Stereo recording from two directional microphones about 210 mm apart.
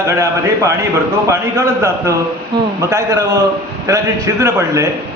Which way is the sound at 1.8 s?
15° right (ahead or behind).